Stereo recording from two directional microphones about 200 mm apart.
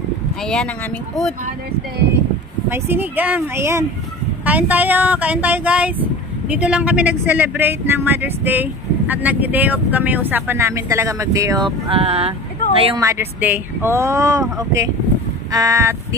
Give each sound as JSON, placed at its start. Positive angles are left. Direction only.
{"t": 0.4, "sound": "speech", "side_deg": 0}
{"t": 2.7, "sound": "speech", "side_deg": -10}
{"t": 13.0, "sound": "speech", "side_deg": -15}
{"t": 15.5, "sound": "speech", "side_deg": -15}